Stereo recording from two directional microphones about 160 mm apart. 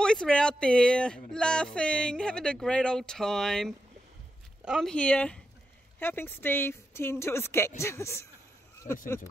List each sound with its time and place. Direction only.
0.0 s speech: 5° left (ahead or behind)
8.8 s speech: 50° left (ahead or behind)